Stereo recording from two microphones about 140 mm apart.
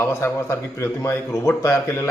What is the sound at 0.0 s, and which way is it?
Speech, 20° left (ahead or behind).